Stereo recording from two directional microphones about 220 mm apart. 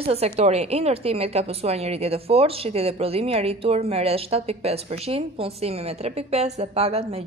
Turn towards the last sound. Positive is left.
turn(degrees=-30)  # may be behind; listen again after turning